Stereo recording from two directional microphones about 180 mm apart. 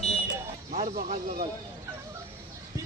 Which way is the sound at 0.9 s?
50° right (ahead or behind).